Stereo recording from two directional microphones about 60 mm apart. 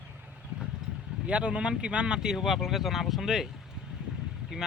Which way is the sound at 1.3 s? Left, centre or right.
Centre.